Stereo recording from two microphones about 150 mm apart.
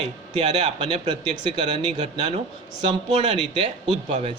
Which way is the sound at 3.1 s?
40° right (ahead or behind).